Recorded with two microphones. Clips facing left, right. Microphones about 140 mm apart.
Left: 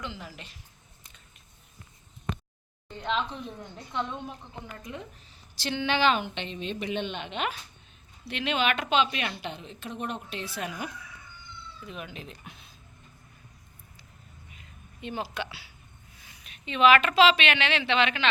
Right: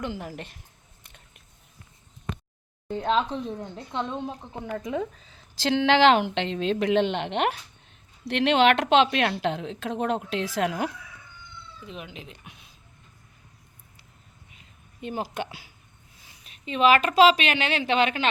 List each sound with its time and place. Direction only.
0.0 s speech: 50° right (ahead or behind)
2.9 s speech: 45° right (ahead or behind); by 4.4 s 30° right (ahead or behind)
4.6 s speech: 75° right (ahead or behind)
5.6 s a woman's voice: 90° right
11.9 s speech: 20° right (ahead or behind)
15.0 s speech: 45° right (ahead or behind)
16.2 s a woman's voice: 35° right (ahead or behind)